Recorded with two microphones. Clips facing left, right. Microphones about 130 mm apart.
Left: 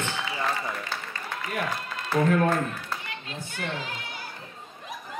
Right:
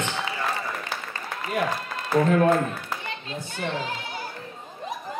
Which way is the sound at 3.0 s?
30° right (ahead or behind).